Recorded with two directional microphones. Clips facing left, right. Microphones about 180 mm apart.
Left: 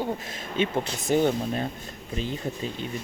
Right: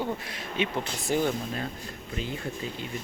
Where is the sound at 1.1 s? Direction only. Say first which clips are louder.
Left 4 dB; 20° left (ahead or behind).